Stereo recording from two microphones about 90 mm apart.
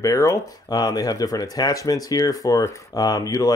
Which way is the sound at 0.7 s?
50° left (ahead or behind).